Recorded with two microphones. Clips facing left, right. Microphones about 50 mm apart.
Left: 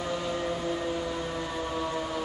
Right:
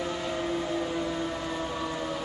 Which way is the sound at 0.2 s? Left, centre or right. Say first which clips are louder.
Even; centre.